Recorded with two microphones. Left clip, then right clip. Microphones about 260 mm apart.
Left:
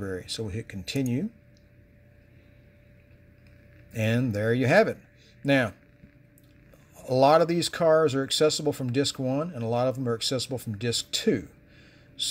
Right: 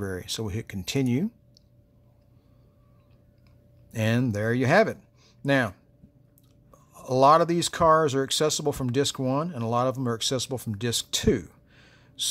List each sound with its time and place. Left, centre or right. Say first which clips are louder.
0.0 s speech: right 1 dB; right
3.9 s speech: right 1 dB; right
7.0 s speech: right 1 dB; centre